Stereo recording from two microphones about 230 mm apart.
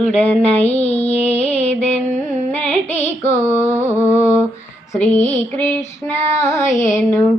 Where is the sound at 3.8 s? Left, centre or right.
Centre.